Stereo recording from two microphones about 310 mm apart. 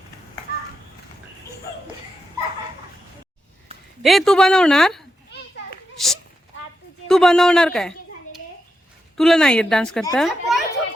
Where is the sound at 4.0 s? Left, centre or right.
Centre.